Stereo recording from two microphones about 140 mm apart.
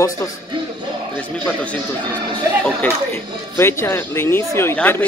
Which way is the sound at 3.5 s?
20° left (ahead or behind).